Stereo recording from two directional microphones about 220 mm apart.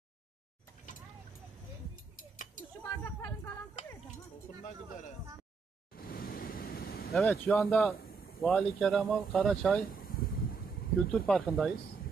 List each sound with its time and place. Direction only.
2.8 s a sound: 10° left (ahead or behind)
5.9 s waves: 45° left (ahead or behind)
7.1 s speech: centre (ahead or behind)
9.9 s wind: 40° left (ahead or behind)
11.2 s speech: centre (ahead or behind)